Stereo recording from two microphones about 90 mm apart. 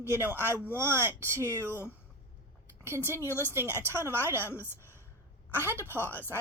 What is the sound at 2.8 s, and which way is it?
Speech, 30° right (ahead or behind).